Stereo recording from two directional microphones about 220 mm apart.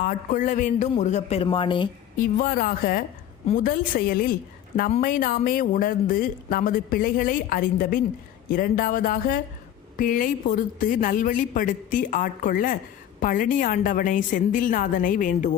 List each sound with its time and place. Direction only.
0.0 s speech: 40° left (ahead or behind); by 1.9 s 20° left (ahead or behind)
2.1 s speech: 40° left (ahead or behind)